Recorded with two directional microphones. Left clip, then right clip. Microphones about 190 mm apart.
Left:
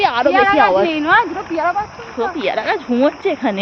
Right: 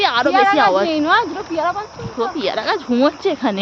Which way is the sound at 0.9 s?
65° right (ahead or behind).